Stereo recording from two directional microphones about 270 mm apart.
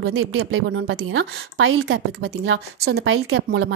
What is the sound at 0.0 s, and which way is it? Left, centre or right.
A woman's voice, right.